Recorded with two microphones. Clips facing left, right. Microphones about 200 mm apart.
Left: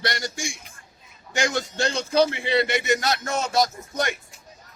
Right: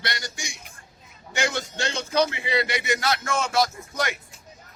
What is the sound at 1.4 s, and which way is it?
Speech, 40° left (ahead or behind).